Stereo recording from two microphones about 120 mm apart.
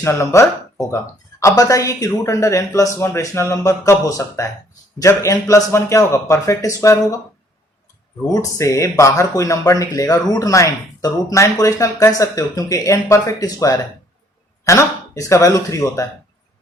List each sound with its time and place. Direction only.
0.0 s speech: 25° left (ahead or behind)
8.5 s speech: 25° left (ahead or behind)